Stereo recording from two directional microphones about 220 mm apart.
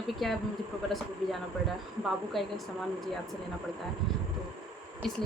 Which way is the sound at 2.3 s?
Centre (ahead or behind).